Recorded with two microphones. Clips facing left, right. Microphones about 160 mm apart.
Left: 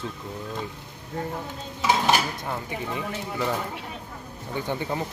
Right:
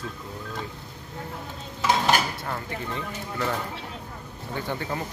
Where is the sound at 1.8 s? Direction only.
10° left (ahead or behind).